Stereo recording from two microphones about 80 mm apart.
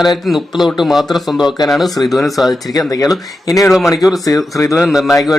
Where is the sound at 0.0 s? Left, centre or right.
Centre.